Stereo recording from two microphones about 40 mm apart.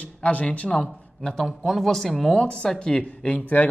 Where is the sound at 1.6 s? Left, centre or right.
Centre.